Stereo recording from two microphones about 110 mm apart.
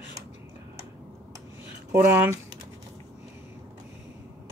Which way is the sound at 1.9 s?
20° right (ahead or behind).